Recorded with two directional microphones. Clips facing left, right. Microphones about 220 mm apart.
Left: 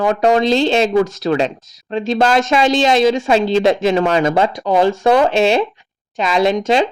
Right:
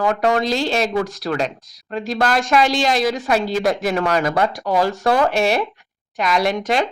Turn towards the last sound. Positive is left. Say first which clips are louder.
# left 5 dB
turn(degrees=25)  # may be behind; listen again after turning